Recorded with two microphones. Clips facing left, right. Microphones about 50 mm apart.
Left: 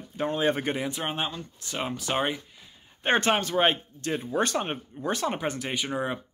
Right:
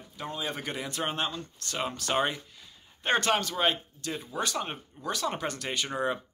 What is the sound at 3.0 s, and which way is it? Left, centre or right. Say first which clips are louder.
Speech: left 2 dB; left.